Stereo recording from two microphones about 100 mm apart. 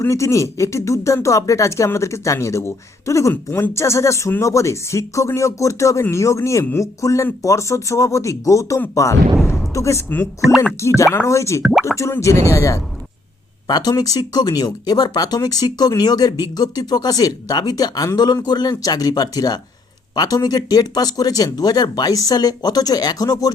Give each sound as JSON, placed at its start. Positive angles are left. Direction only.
{"t": 0.0, "sound": "speech", "side_deg": 30}
{"t": 11.6, "sound": "speech", "side_deg": -5}
{"t": 11.9, "sound": "speech", "side_deg": 30}
{"t": 13.7, "sound": "speech", "side_deg": 40}